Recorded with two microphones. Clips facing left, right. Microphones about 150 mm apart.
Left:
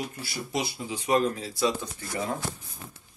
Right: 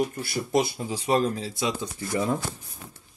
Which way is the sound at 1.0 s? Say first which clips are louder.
Right 1 dB; 30° right (ahead or behind).